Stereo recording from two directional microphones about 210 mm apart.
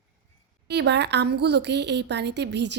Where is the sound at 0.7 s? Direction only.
55° right (ahead or behind).